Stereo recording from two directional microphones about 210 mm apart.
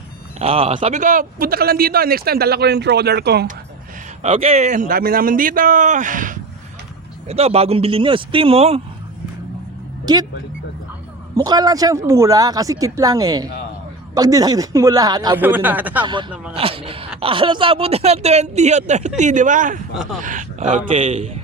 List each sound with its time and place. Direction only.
0.3 s speech: 25° right (ahead or behind); by 3.5 s 50° right (ahead or behind)
4.2 s speech: 25° right (ahead or behind)
10.1 s speech: 20° right (ahead or behind)
11.3 s speech: 20° right (ahead or behind)
16.6 s a sound: 25° right (ahead or behind)
17.2 s speech: 25° right (ahead or behind)